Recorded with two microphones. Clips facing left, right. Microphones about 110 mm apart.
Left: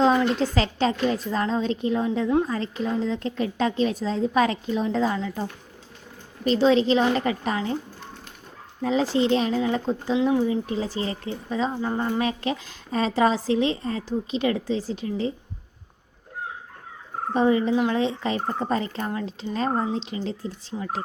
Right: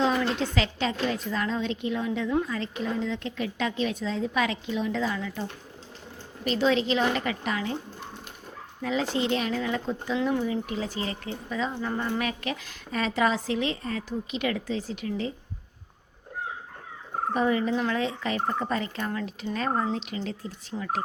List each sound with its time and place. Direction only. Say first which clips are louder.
0.0 s speech: left 5 dB; 35° left (ahead or behind)
8.8 s speech: left 5 dB; 35° left (ahead or behind)
10.2 s speech: left 5 dB; 20° left (ahead or behind)
17.3 s speech: left 5 dB; 25° left (ahead or behind)